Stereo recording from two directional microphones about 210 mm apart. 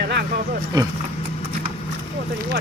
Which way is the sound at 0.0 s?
50° right (ahead or behind).